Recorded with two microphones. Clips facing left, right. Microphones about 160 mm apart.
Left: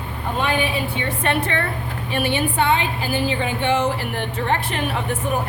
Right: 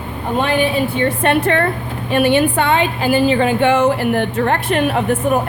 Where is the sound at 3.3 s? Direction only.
85° right.